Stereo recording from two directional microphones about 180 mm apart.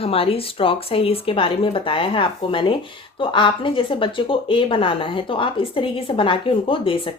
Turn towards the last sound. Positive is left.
turn(degrees=30)  # may be behind; listen again after turning